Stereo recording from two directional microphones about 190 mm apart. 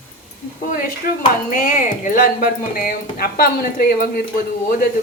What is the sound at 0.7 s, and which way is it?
Speech, 50° left (ahead or behind).